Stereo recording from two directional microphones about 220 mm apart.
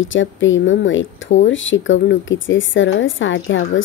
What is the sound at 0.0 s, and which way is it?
Speech, 60° left (ahead or behind).